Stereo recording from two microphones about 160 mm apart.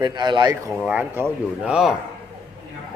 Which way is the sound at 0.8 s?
10° right (ahead or behind).